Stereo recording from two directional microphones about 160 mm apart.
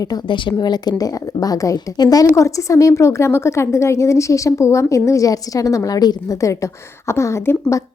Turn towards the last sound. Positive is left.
turn(degrees=15)  # may be behind; listen again after turning